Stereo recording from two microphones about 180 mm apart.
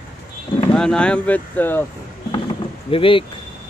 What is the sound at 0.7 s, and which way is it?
Speech, 5° left (ahead or behind).